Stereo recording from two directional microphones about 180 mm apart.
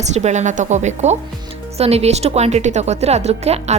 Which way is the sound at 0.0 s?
40° right (ahead or behind).